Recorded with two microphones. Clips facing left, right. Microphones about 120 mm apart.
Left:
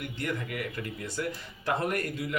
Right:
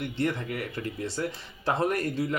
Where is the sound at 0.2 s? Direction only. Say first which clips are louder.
Right 4 dB; 35° right (ahead or behind).